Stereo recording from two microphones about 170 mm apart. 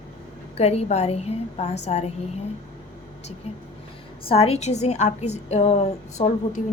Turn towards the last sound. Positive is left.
turn(degrees=45)  # may be behind; listen again after turning